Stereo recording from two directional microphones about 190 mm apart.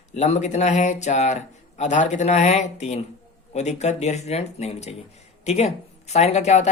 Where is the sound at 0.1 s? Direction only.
40° left (ahead or behind).